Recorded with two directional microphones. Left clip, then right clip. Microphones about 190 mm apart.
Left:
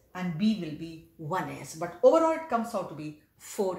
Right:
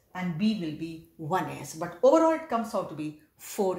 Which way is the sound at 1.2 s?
40° right (ahead or behind).